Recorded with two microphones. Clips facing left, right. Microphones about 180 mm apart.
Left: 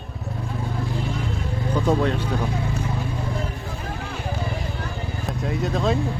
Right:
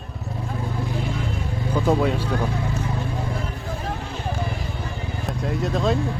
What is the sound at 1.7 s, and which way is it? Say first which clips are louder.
Speech: right 1 dB; 5° right (ahead or behind).